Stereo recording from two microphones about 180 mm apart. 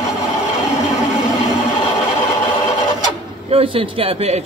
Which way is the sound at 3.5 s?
30° right (ahead or behind).